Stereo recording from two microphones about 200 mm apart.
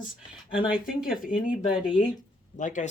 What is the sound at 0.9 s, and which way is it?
Speech, 5° right (ahead or behind).